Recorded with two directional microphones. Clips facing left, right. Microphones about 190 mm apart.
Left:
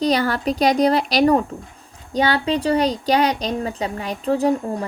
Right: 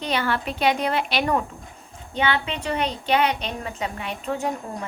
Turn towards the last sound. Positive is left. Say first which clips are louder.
# left 8 dB
turn(degrees=35)  # may be behind; listen again after turning